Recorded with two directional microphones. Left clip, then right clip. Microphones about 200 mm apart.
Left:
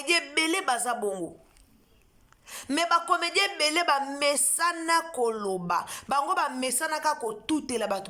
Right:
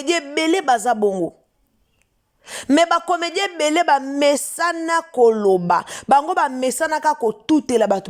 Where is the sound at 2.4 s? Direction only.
40° right (ahead or behind).